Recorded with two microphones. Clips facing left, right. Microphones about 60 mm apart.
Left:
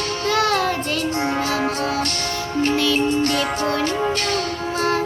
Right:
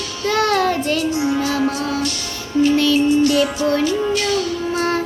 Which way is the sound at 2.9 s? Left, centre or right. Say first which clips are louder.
Right 5 dB; left.